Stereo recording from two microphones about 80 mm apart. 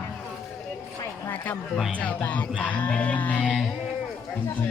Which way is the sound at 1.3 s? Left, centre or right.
Left.